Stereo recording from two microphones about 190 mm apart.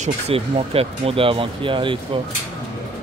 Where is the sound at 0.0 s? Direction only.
30° right (ahead or behind).